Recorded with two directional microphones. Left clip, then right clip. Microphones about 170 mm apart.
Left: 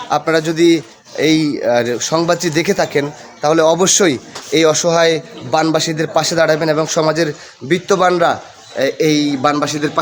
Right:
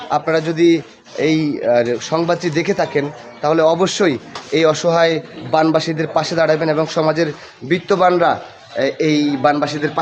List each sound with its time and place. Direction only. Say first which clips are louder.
0.1 s a man's voice: left 2 dB; 30° left (ahead or behind)